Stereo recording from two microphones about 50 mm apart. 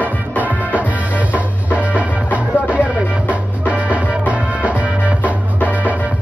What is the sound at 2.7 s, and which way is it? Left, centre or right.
Music, right.